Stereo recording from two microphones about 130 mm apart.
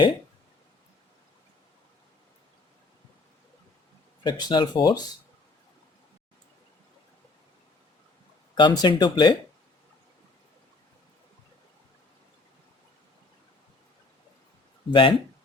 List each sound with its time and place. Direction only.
4.2 s speech: 35° left (ahead or behind)
8.5 s speech: 35° left (ahead or behind)
14.8 s speech: 40° left (ahead or behind)